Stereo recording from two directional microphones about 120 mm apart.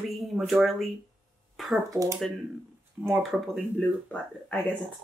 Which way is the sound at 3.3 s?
Centre (ahead or behind).